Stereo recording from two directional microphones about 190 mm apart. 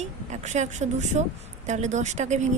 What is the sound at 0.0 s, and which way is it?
A woman's voice, 40° right (ahead or behind).